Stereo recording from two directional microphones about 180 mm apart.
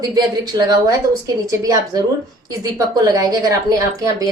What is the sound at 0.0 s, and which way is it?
A woman's voice, 20° right (ahead or behind).